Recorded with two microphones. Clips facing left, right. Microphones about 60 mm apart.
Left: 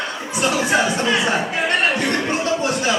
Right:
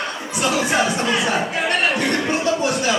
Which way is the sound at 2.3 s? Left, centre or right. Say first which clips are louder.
Right 1 dB; left.